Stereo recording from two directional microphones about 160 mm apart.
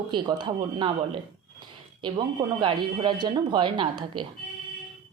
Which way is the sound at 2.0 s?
30° right (ahead or behind).